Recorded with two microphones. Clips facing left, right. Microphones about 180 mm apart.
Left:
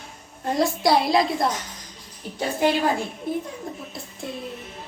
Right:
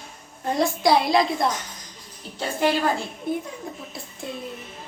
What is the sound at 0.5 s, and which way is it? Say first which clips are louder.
Speech: even; centre (ahead or behind).